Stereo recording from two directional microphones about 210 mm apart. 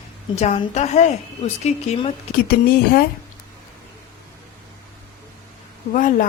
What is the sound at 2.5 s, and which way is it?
Speech, 45° left (ahead or behind).